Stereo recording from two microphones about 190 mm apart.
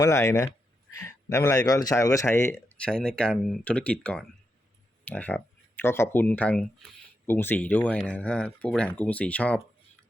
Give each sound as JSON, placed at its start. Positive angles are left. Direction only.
{"t": 0.0, "sound": "a man's voice", "side_deg": 15}